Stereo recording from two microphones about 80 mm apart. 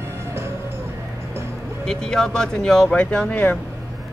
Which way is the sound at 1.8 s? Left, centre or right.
Centre.